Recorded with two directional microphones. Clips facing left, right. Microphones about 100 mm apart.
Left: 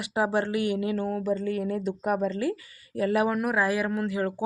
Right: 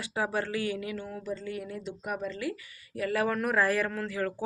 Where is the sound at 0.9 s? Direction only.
45° left (ahead or behind); by 3.2 s 30° left (ahead or behind).